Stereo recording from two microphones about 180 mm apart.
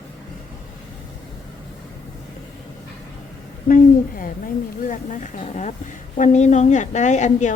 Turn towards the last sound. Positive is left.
turn(degrees=40)  # may be behind; listen again after turning